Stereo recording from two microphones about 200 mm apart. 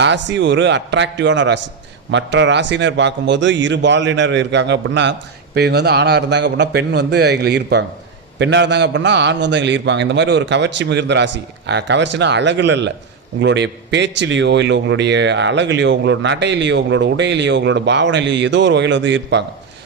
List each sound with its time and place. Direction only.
0.0 s a man's voice: 65° right (ahead or behind)